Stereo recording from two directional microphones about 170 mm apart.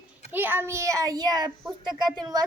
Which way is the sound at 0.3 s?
10° right (ahead or behind).